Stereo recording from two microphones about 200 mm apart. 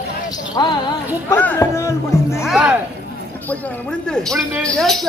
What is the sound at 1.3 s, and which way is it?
Speech, 10° left (ahead or behind).